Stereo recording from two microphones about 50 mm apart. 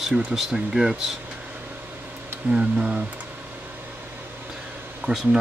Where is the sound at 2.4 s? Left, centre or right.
Right.